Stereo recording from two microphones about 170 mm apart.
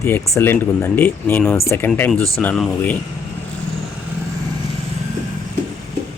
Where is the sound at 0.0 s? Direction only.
15° left (ahead or behind).